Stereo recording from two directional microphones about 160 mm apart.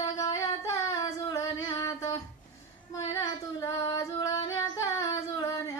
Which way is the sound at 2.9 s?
25° left (ahead or behind).